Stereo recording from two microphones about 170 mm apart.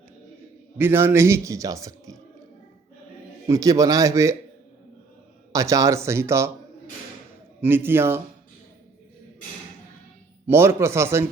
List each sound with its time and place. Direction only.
0.8 s a man's voice: 15° right (ahead or behind)
3.4 s a man's voice: 20° right (ahead or behind)
5.5 s a man's voice: 20° right (ahead or behind)
7.6 s a man's voice: 15° right (ahead or behind)
10.4 s a man's voice: 15° right (ahead or behind)